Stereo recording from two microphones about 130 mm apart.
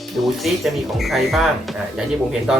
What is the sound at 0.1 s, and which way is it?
Speech, centre (ahead or behind).